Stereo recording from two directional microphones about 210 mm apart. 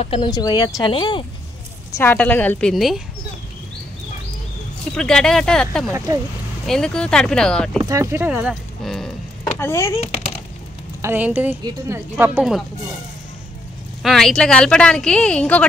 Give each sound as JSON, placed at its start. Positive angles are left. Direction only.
{"t": 0.0, "sound": "speech", "side_deg": 25}
{"t": 2.0, "sound": "a woman's voice", "side_deg": 10}
{"t": 4.9, "sound": "a woman's voice", "side_deg": 5}
{"t": 7.8, "sound": "a woman's voice", "side_deg": -15}
{"t": 9.6, "sound": "a woman's voice", "side_deg": 15}
{"t": 11.0, "sound": "a woman's voice", "side_deg": -10}
{"t": 14.0, "sound": "a woman's voice", "side_deg": 0}